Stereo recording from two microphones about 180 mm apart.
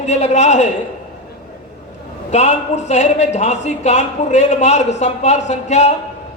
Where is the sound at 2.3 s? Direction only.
40° left (ahead or behind).